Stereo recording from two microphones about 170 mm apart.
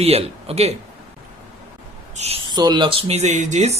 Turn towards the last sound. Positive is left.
turn(degrees=-45)  # may be behind; listen again after turning